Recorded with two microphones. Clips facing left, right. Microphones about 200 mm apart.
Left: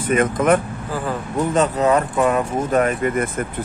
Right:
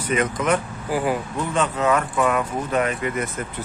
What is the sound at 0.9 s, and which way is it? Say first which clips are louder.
Speech: right 3 dB; 15° right (ahead or behind).